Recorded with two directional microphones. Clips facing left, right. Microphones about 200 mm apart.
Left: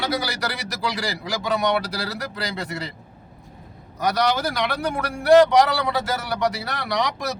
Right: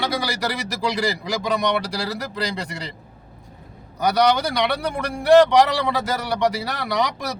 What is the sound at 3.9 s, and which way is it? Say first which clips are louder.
Speech: right 3 dB; centre (ahead or behind).